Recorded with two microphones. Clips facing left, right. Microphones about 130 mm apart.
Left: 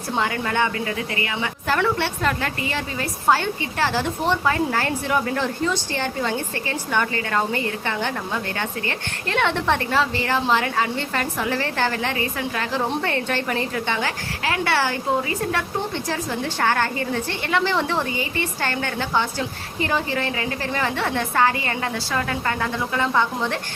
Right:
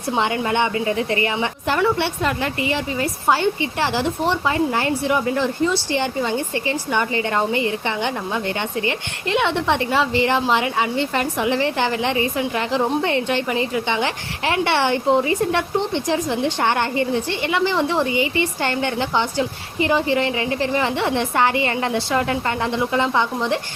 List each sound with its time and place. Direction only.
0.2 s a woman's voice: 20° right (ahead or behind)
1.6 s a woman's voice: 15° right (ahead or behind)